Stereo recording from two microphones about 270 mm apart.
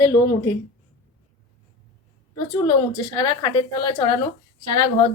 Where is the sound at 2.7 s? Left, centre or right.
Centre.